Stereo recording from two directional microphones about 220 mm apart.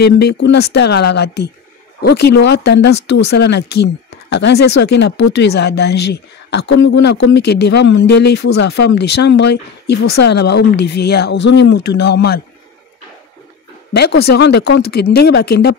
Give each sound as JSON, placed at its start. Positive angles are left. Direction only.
{"t": 0.0, "sound": "speech", "side_deg": 50}
{"t": 13.9, "sound": "speech", "side_deg": 45}